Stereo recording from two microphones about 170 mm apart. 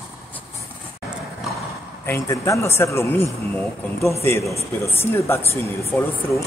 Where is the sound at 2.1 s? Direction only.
15° left (ahead or behind).